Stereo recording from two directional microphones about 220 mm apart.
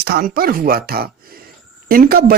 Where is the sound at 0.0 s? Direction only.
45° right (ahead or behind).